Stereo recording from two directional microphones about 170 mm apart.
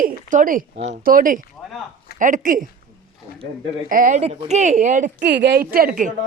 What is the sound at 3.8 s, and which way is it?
Speech, 50° right (ahead or behind).